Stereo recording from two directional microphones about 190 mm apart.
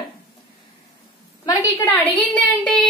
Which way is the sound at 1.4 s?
20° left (ahead or behind).